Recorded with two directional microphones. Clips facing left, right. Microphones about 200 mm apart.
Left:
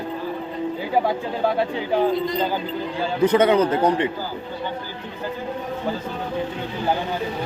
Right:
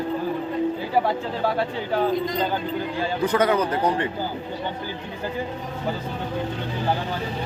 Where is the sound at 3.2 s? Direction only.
20° left (ahead or behind).